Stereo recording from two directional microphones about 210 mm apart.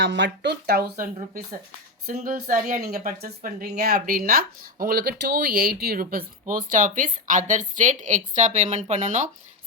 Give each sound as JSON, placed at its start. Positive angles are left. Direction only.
{"t": 0.0, "sound": "speech", "side_deg": -60}
{"t": 2.1, "sound": "speech", "side_deg": -40}